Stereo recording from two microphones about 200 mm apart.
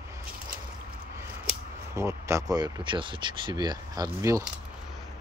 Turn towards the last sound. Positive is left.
turn(degrees=-15)  # may be behind; listen again after turning